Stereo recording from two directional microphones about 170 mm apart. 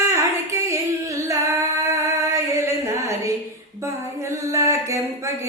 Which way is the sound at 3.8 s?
15° right (ahead or behind).